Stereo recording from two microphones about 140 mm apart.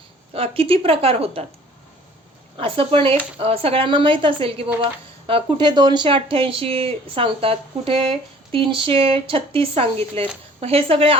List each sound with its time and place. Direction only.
0.3 s a woman's voice: 45° right (ahead or behind)
2.6 s speech: 40° right (ahead or behind)